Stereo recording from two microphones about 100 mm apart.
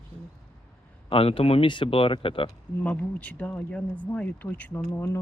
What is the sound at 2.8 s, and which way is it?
Speech, 15° left (ahead or behind).